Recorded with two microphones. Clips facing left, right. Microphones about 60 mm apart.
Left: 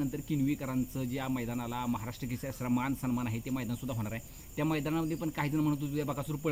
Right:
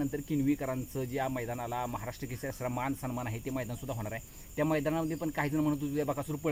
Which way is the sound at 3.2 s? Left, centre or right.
Centre.